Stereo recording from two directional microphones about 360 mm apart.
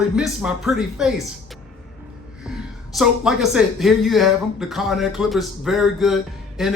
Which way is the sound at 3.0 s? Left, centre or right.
Centre.